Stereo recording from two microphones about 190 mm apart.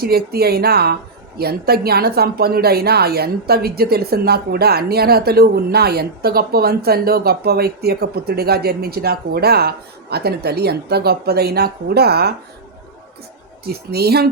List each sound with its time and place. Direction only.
0.0 s a woman's voice: 55° right (ahead or behind)
13.7 s a woman's voice: 55° right (ahead or behind)